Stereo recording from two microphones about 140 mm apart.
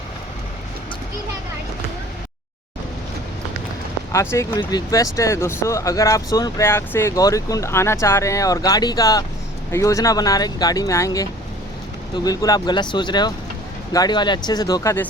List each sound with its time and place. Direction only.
4.1 s speech: 20° left (ahead or behind)